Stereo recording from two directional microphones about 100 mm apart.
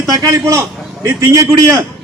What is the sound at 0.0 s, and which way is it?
A man's voice, 40° right (ahead or behind).